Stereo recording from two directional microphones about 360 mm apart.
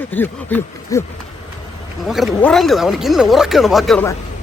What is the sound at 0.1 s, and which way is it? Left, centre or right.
Speech, centre.